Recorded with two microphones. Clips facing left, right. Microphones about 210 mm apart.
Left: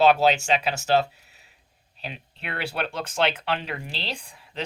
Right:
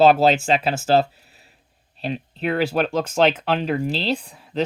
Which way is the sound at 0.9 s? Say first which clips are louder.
Right 4 dB; 40° right (ahead or behind).